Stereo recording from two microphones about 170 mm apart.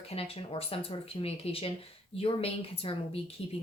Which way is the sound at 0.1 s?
35° left (ahead or behind).